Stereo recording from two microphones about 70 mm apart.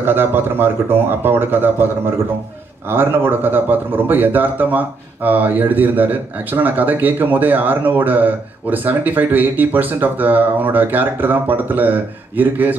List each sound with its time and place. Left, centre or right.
0.0 s speech: right